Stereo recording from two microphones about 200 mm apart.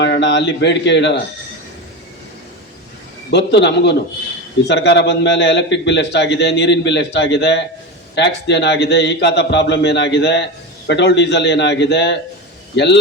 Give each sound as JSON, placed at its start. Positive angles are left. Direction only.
{"t": 0.0, "sound": "speech", "side_deg": 60}
{"t": 3.2, "sound": "a man's voice", "side_deg": 60}